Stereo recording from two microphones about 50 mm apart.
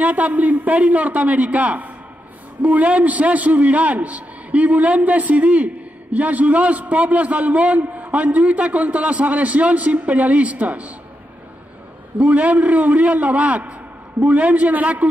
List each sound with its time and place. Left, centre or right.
0.0 s a man's voice: right
12.2 s a man's voice: right